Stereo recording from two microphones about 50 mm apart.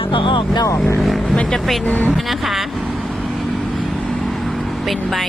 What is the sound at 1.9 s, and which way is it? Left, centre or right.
Speech, left.